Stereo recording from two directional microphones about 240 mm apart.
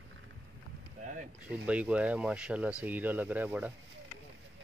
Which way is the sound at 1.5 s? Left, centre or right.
Centre.